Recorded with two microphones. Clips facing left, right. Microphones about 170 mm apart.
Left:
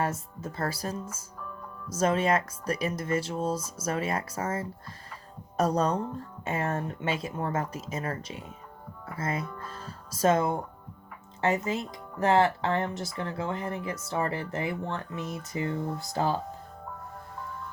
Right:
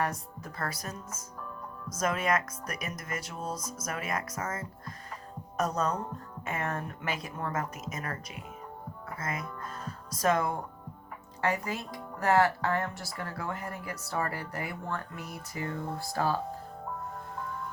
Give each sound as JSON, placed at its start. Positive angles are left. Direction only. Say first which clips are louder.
{"t": 0.0, "sound": "speech", "louder": "left 2 dB", "side_deg": 25}